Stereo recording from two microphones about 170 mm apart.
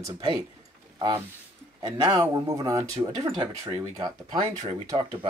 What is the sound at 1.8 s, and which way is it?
Speech, 25° right (ahead or behind).